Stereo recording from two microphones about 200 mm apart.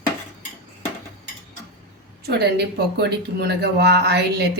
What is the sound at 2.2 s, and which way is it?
Speech, 55° right (ahead or behind).